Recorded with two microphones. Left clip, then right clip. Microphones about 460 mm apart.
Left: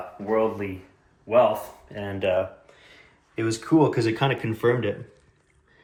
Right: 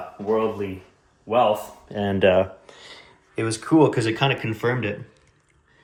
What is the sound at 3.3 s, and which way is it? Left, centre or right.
Speech, centre.